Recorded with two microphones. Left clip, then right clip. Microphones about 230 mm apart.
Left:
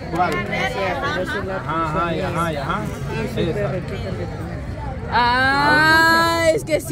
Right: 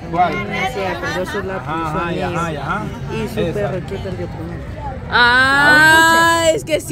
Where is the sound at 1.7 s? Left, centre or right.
Right.